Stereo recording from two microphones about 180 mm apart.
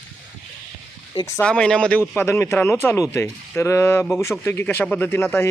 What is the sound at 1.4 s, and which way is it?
A man's voice, 5° left (ahead or behind).